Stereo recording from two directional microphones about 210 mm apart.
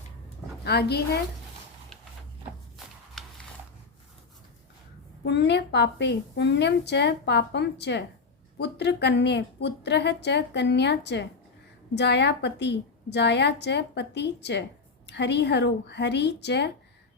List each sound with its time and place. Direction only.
0.6 s a woman's voice: 50° left (ahead or behind)
5.2 s a woman's voice: 55° left (ahead or behind)